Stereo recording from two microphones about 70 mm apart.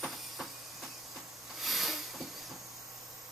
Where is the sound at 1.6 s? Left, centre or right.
Centre.